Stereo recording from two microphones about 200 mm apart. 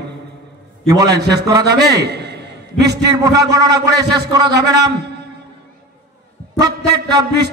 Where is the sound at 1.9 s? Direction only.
55° right (ahead or behind).